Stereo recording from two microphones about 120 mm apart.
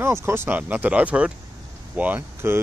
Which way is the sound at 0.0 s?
20° right (ahead or behind).